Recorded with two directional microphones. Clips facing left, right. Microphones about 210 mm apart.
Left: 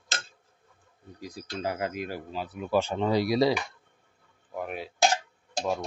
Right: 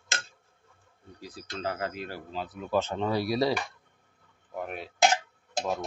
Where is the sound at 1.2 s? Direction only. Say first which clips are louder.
Left 2 dB; 15° left (ahead or behind).